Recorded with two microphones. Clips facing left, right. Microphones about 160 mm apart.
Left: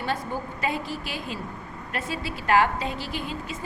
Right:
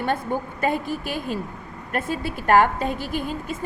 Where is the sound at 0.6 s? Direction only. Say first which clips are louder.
Right 5 dB; 50° right (ahead or behind).